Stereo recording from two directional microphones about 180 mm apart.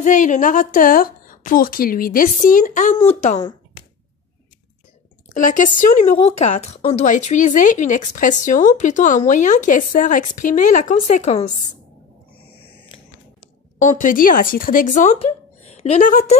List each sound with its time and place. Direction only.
0.0 s a woman's voice: 45° left (ahead or behind)
5.4 s a woman's voice: 45° left (ahead or behind)
13.7 s a woman's voice: 45° left (ahead or behind)
15.1 s a woman's voice: 35° left (ahead or behind)